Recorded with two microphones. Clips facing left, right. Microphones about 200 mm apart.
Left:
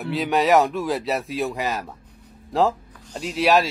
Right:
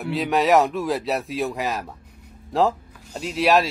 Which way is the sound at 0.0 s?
Centre (ahead or behind).